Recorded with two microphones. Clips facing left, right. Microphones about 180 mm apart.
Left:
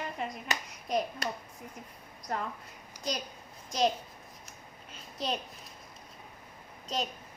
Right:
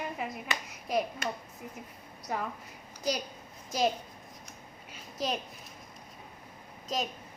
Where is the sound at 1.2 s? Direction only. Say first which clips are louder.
Right 1 dB; 35° left (ahead or behind).